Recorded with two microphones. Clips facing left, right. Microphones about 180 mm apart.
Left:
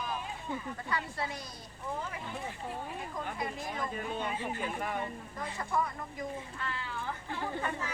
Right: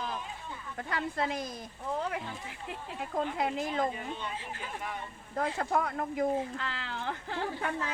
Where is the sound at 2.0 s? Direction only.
70° right (ahead or behind).